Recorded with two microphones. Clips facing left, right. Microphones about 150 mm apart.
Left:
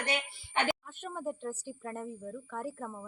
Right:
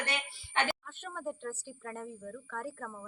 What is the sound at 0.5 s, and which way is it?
A woman's voice, 15° left (ahead or behind).